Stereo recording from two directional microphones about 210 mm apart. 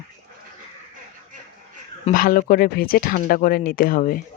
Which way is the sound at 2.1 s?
40° left (ahead or behind).